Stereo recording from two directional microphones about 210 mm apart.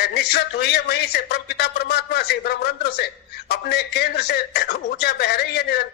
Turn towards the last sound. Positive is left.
turn(degrees=50)  # may be behind; listen again after turning